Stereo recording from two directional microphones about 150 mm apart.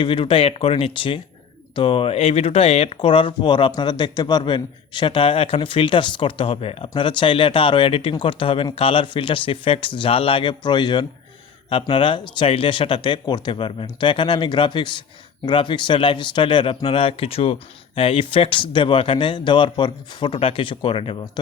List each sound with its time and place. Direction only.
0.0 s a man's voice: 35° left (ahead or behind)